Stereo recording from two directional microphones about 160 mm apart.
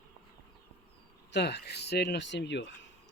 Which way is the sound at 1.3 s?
90° left.